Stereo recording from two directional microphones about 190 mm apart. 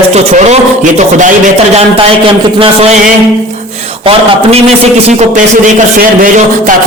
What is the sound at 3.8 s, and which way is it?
A man's voice, 30° right (ahead or behind).